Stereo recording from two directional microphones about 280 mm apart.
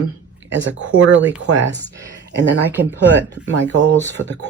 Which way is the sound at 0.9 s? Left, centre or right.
Right.